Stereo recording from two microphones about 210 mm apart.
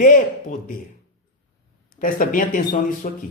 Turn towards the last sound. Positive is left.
turn(degrees=40)  # may be behind; listen again after turning